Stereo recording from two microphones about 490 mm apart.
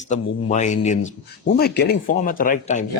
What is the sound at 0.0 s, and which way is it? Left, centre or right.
Speech, centre.